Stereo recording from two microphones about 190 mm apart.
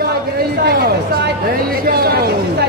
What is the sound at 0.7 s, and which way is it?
Speech, 60° right (ahead or behind).